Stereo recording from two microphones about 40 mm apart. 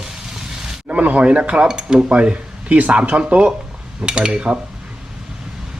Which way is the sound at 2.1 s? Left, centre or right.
Right.